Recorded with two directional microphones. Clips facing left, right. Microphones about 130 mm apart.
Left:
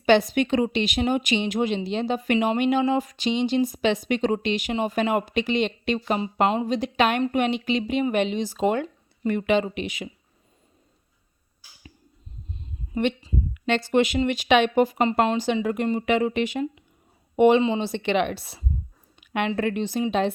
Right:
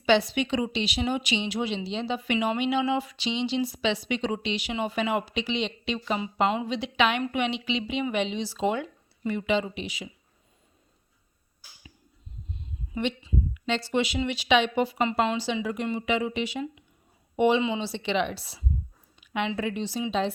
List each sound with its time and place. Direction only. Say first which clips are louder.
0.0 s a woman's voice: left 4 dB; 50° left (ahead or behind)
12.9 s a woman's voice: left 4 dB; 55° left (ahead or behind)